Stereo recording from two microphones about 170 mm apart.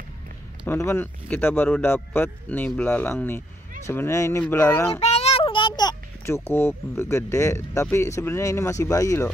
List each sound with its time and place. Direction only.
0.7 s speech: 15° left (ahead or behind)
5.0 s a child's voice: 40° left (ahead or behind); by 9.3 s 20° left (ahead or behind)